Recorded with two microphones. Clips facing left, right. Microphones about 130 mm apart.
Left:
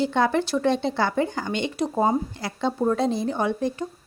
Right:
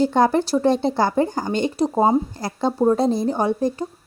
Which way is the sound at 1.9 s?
25° right (ahead or behind).